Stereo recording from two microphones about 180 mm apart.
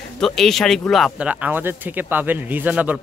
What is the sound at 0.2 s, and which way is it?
Speech, centre (ahead or behind).